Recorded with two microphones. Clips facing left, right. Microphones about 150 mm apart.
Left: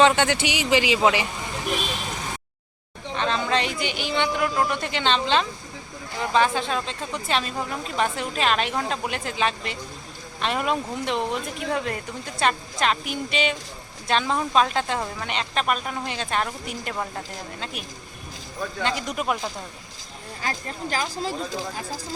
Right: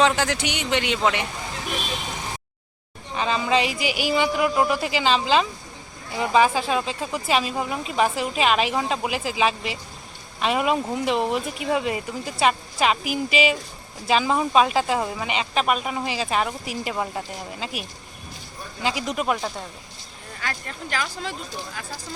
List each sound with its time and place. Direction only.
0.0 s speech: centre (ahead or behind)
3.2 s speech: 5° right (ahead or behind)
20.4 s speech: 35° left (ahead or behind)